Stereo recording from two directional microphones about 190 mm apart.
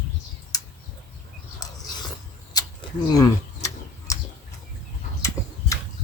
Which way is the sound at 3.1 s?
20° left (ahead or behind).